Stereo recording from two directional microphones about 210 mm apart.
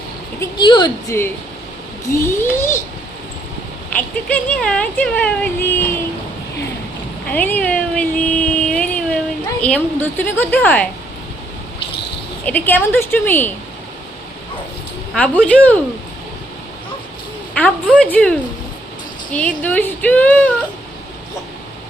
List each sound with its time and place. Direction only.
0.3 s speech: 20° left (ahead or behind)
3.9 s speech: 5° left (ahead or behind)
7.3 s speech: 10° left (ahead or behind)
12.5 s speech: 10° left (ahead or behind)
15.1 s speech: 5° left (ahead or behind)
17.5 s speech: 5° left (ahead or behind)